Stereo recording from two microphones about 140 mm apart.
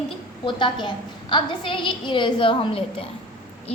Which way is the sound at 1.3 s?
35° left (ahead or behind).